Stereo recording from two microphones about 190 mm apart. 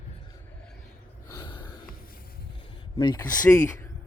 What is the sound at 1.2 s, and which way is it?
Gasp, 20° left (ahead or behind).